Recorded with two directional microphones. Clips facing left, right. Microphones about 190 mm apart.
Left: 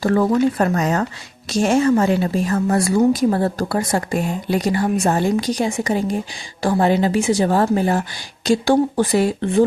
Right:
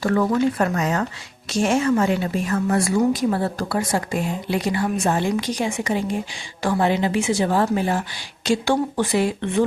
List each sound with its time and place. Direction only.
0.0 s a woman's voice: 35° left (ahead or behind)